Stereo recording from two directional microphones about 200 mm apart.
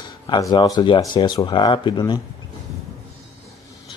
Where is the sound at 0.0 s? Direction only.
20° left (ahead or behind).